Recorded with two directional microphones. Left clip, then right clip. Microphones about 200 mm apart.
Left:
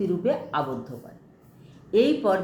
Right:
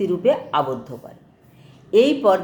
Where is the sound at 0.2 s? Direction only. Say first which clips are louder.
Right 7 dB; 15° right (ahead or behind).